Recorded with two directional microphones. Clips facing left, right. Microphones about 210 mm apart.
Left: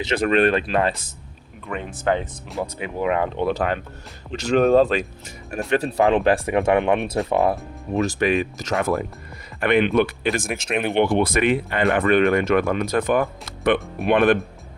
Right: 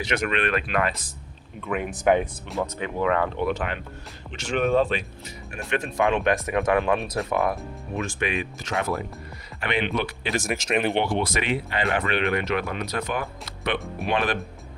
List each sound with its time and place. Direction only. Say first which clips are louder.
0.0 s speech: left 7 dB; 30° left (ahead or behind)
1.6 s speech: right 2 dB; 5° right (ahead or behind)
2.6 s speech: left 1 dB; 15° left (ahead or behind)
3.4 s speech: left 4 dB; 35° left (ahead or behind)
8.8 s speech: left 4 dB; 55° left (ahead or behind)
10.5 s speech: even; centre (ahead or behind)
10.9 s speech: left 6 dB; 55° left (ahead or behind)